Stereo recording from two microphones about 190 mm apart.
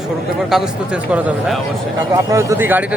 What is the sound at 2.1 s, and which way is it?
Speech, 15° right (ahead or behind).